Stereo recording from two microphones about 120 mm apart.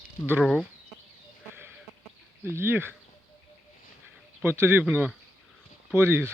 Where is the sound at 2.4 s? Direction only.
20° right (ahead or behind).